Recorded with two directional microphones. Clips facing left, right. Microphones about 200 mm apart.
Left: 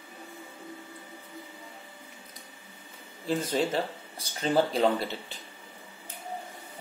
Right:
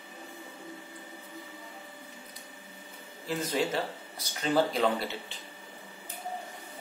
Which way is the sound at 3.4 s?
30° left (ahead or behind).